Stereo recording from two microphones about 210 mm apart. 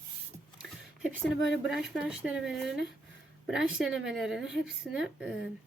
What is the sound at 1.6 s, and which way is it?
A woman's voice, centre (ahead or behind).